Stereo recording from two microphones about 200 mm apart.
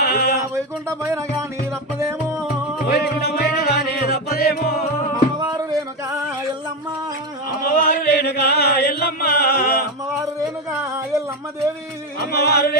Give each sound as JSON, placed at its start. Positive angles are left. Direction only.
{"t": 0.0, "sound": "a sound", "side_deg": 50}
{"t": 0.5, "sound": "speech", "side_deg": -15}
{"t": 2.9, "sound": "music", "side_deg": 55}
{"t": 5.4, "sound": "a sound", "side_deg": -20}
{"t": 7.7, "sound": "music", "side_deg": 50}
{"t": 12.2, "sound": "music", "side_deg": 55}